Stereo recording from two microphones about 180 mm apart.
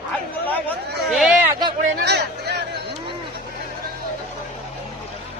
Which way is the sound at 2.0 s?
65° right (ahead or behind).